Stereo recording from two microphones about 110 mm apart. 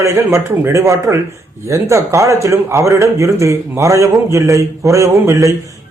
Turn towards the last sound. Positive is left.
turn(degrees=-30)  # may be behind; listen again after turning